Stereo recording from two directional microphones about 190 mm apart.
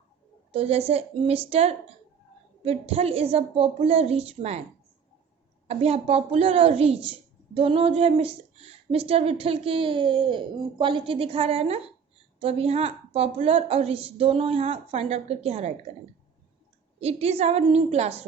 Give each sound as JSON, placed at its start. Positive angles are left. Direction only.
{"t": 0.5, "sound": "a woman's voice", "side_deg": -30}
{"t": 5.6, "sound": "a woman's voice", "side_deg": -30}
{"t": 17.0, "sound": "a woman's voice", "side_deg": -35}